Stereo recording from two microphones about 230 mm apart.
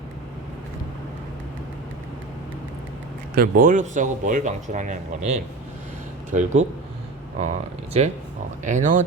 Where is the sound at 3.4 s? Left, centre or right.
Right.